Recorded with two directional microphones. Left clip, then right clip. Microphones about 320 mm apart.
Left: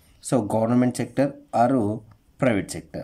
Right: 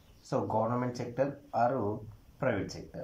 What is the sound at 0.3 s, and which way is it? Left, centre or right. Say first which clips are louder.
Speech: left 8 dB; left.